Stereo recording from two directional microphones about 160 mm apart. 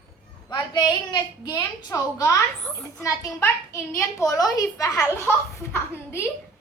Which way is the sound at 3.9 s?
20° left (ahead or behind).